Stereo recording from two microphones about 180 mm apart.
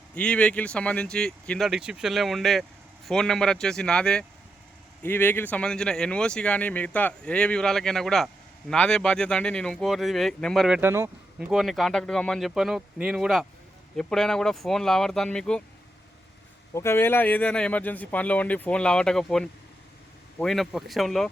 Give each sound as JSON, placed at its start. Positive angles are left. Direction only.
{"t": 0.1, "sound": "speech", "side_deg": 5}
{"t": 10.8, "sound": "speech", "side_deg": -15}
{"t": 16.7, "sound": "speech", "side_deg": 15}